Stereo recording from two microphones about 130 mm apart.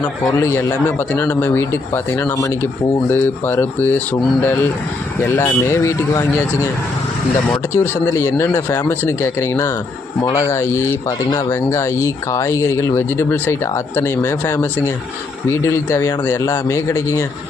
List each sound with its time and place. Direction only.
0.3 s speech: 25° left (ahead or behind)
7.7 s speech: 20° left (ahead or behind)